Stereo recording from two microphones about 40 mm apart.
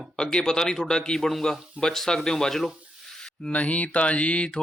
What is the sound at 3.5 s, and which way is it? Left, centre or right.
Mantra, left.